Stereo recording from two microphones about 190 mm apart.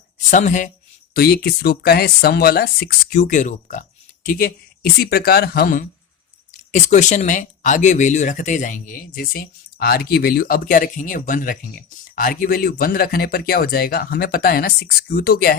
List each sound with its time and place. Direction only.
0.3 s speech: 40° left (ahead or behind)
1.1 s speech: 55° left (ahead or behind)